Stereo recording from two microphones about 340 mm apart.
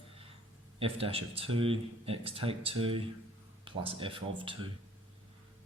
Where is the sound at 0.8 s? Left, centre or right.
Centre.